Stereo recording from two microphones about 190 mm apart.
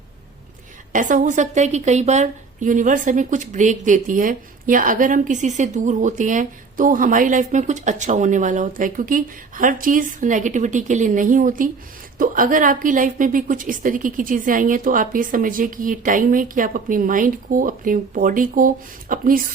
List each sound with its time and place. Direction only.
0.9 s a woman's voice: 40° right (ahead or behind)